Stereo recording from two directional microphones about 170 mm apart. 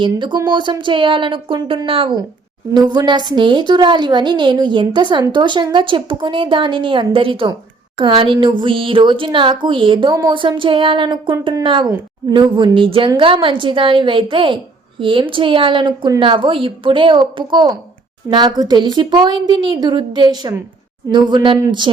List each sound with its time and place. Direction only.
0.0 s a woman's voice: 30° right (ahead or behind)